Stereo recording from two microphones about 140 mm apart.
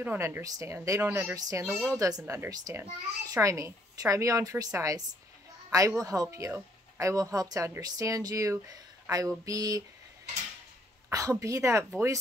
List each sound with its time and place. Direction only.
0.0 s a child's voice: 15° right (ahead or behind)
11.1 s a child's voice: 20° right (ahead or behind)